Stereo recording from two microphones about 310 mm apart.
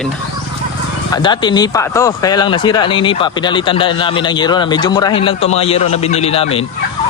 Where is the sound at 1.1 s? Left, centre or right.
Centre.